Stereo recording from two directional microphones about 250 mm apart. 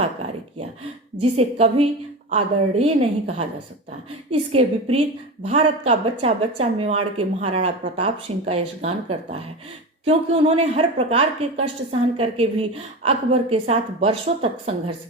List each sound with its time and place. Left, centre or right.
1.2 s a woman's voice: right